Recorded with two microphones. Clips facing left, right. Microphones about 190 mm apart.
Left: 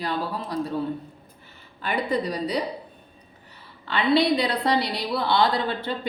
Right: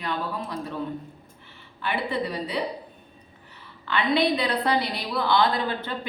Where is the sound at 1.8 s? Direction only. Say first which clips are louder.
Left 2 dB; 40° left (ahead or behind).